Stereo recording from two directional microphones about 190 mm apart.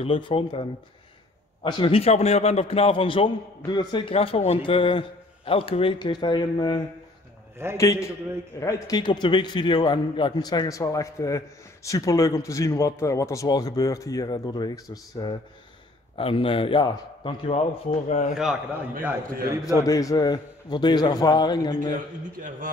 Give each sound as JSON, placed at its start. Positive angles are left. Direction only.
{"t": 0.0, "sound": "a man's voice", "side_deg": 25}
{"t": 18.3, "sound": "a man's voice", "side_deg": -5}
{"t": 19.8, "sound": "a man's voice", "side_deg": 20}